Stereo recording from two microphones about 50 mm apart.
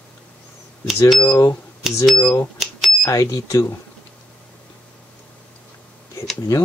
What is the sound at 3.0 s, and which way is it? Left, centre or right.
Speech, left.